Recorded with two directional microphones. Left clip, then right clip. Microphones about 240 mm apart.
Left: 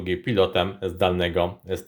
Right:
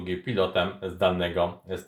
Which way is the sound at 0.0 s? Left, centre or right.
Left.